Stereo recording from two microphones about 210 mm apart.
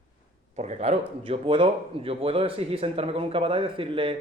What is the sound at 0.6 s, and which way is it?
A man's voice, 30° right (ahead or behind).